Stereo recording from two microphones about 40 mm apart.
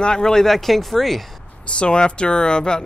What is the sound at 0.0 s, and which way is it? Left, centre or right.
Speech, centre.